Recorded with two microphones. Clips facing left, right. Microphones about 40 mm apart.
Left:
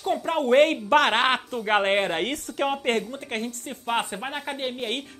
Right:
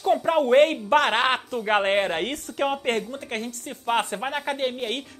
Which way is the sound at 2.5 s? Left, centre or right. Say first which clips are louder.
Right 1 dB; left.